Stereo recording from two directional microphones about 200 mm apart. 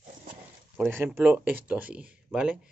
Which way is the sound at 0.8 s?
10° right (ahead or behind).